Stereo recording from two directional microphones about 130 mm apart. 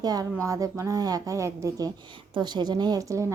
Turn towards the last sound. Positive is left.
turn(degrees=-25)  # may be behind; listen again after turning